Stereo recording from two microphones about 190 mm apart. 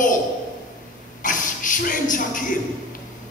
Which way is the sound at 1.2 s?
45° left (ahead or behind).